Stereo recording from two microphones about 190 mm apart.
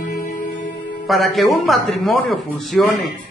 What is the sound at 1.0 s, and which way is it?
A man's voice, centre (ahead or behind).